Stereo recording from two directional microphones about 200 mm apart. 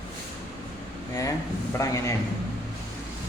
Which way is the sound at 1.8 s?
15° left (ahead or behind).